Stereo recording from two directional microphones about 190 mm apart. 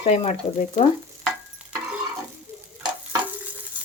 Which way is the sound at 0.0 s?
30° left (ahead or behind).